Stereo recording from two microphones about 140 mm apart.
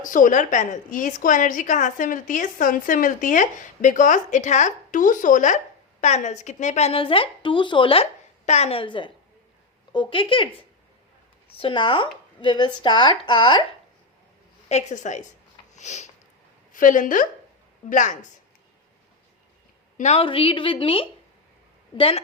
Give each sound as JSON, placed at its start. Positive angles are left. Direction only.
{"t": 0.0, "sound": "a woman's voice", "side_deg": 70}
{"t": 8.4, "sound": "speech", "side_deg": 50}
{"t": 11.5, "sound": "speech", "side_deg": 35}
{"t": 14.7, "sound": "a woman's voice", "side_deg": 55}
{"t": 15.7, "sound": "sniff", "side_deg": 55}
{"t": 16.7, "sound": "a woman's voice", "side_deg": 70}
{"t": 20.0, "sound": "speech", "side_deg": 55}
{"t": 20.2, "sound": "speech", "side_deg": 40}